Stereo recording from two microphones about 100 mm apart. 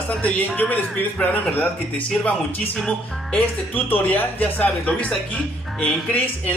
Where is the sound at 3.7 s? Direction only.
15° left (ahead or behind).